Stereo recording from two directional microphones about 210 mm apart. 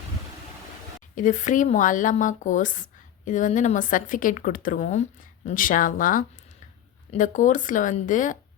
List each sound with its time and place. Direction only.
1.1 s speech: 35° left (ahead or behind)